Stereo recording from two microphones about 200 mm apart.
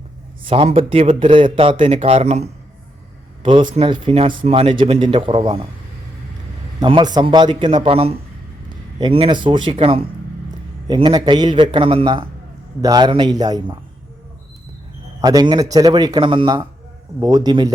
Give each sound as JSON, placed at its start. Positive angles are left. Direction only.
{"t": 0.4, "sound": "a man's voice", "side_deg": -30}
{"t": 6.7, "sound": "a man's voice", "side_deg": -20}
{"t": 15.2, "sound": "a man's voice", "side_deg": -20}